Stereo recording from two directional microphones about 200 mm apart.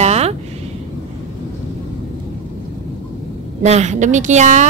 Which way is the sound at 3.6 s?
35° right (ahead or behind).